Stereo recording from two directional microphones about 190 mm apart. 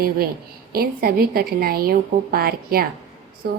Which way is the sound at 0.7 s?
50° right (ahead or behind).